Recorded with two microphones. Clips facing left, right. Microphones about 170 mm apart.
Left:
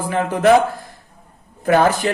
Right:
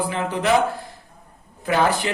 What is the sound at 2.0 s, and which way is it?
Speech, 45° left (ahead or behind).